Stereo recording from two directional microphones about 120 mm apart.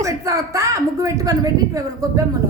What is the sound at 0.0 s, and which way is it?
A woman's voice, 25° right (ahead or behind).